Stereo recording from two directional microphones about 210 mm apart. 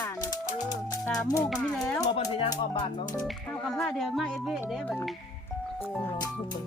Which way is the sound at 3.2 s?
Centre (ahead or behind).